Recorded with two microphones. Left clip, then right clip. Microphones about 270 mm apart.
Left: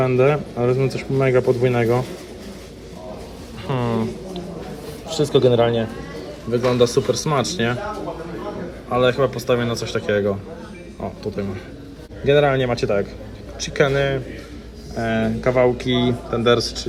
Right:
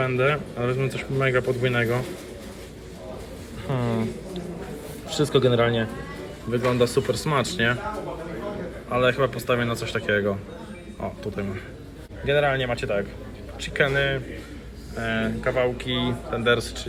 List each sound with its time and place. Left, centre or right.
0.0 s speech: centre
3.7 s a sound: centre
5.1 s speech: centre
8.9 s speech: centre
12.2 s speech: centre